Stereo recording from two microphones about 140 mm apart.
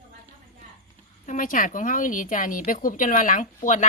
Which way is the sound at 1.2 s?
65° left (ahead or behind).